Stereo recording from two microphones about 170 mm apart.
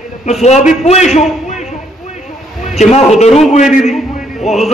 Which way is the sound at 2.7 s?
40° left (ahead or behind).